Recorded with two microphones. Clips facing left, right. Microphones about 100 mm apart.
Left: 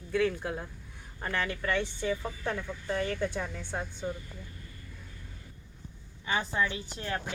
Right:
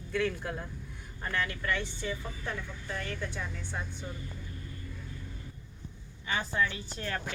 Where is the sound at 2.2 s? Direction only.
35° left (ahead or behind).